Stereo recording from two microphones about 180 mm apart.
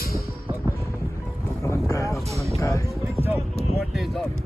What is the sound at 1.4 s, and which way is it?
Livestock, 15° left (ahead or behind).